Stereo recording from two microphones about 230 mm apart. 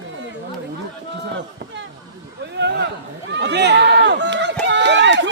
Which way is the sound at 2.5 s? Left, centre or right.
Right.